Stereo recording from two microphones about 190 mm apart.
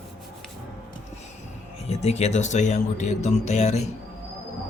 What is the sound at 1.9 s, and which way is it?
Speech, 35° left (ahead or behind).